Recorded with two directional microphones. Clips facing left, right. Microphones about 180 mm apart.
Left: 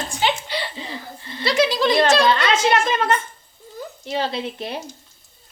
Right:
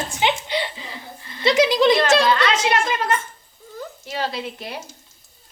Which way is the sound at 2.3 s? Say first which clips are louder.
Left 1 dB; 30° left (ahead or behind).